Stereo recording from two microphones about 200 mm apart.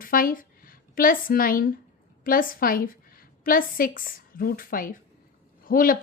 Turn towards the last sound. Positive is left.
turn(degrees=45)  # may be behind; listen again after turning